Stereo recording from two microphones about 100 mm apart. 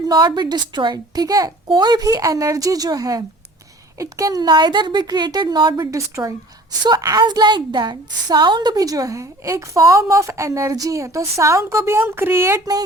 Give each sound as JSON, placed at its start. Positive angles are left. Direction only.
{"t": 0.1, "sound": "a woman's voice", "side_deg": -45}
{"t": 5.8, "sound": "a woman's voice", "side_deg": -35}
{"t": 6.8, "sound": "a woman's voice", "side_deg": -45}
{"t": 8.7, "sound": "a woman's voice", "side_deg": -35}